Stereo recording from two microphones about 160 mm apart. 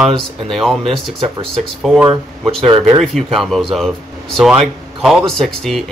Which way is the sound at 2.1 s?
35° right (ahead or behind).